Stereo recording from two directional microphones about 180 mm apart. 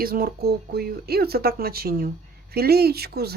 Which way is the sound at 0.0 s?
55° right (ahead or behind).